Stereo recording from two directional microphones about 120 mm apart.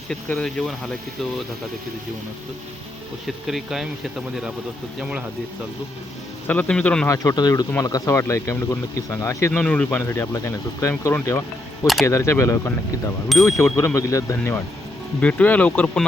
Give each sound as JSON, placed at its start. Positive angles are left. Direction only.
{"t": 0.1, "sound": "speech", "side_deg": 5}
{"t": 3.2, "sound": "speech", "side_deg": 0}
{"t": 4.9, "sound": "speech", "side_deg": -5}
{"t": 6.5, "sound": "speech", "side_deg": 10}
{"t": 7.1, "sound": "speech", "side_deg": 30}
{"t": 9.5, "sound": "speech", "side_deg": 10}
{"t": 10.0, "sound": "speech", "side_deg": 25}
{"t": 15.2, "sound": "speech", "side_deg": 10}